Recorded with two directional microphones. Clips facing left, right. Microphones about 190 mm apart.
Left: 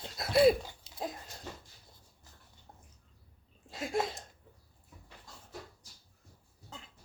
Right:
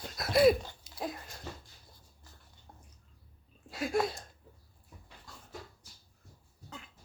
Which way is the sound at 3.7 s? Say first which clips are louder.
Right 2 dB; 25° left (ahead or behind).